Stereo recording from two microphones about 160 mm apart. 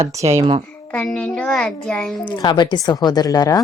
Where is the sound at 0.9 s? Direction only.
5° left (ahead or behind).